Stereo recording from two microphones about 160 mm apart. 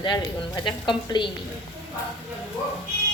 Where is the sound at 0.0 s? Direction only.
30° left (ahead or behind).